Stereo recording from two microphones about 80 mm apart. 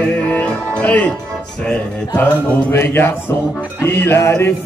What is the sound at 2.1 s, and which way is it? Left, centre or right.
Music, left.